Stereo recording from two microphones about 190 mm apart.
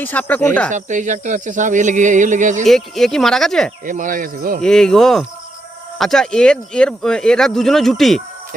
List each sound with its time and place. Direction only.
0.0 s speech: 10° left (ahead or behind)
0.7 s speech: 40° right (ahead or behind)
2.6 s speech: centre (ahead or behind)
3.8 s speech: 45° right (ahead or behind)
4.6 s speech: 5° left (ahead or behind)